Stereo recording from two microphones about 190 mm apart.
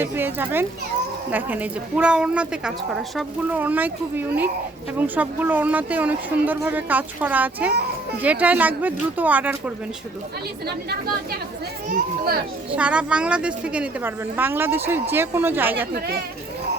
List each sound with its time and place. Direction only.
0.0 s a woman's voice: 10° right (ahead or behind)
11.9 s speech: 50° right (ahead or behind)
12.7 s a woman's voice: 5° right (ahead or behind)